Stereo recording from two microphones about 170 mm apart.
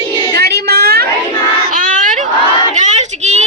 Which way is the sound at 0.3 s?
70° right (ahead or behind).